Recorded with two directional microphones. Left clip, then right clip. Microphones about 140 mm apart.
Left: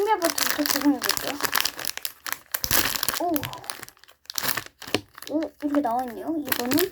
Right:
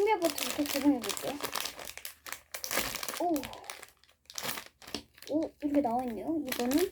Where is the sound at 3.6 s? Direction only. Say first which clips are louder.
Left 8 dB; 35° left (ahead or behind).